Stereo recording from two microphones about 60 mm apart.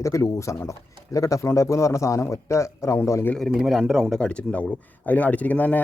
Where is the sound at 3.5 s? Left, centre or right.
Centre.